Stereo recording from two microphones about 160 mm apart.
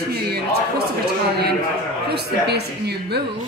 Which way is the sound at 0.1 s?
85° right.